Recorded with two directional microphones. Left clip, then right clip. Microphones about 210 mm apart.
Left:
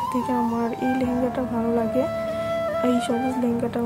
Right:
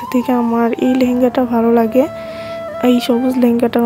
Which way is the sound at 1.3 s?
40° right (ahead or behind).